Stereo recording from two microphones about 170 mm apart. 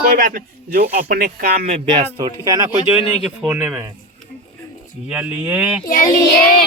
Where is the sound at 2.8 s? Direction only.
35° left (ahead or behind).